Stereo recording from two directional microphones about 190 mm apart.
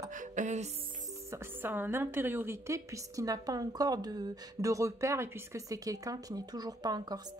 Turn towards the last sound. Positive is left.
turn(degrees=-20)  # may be behind; listen again after turning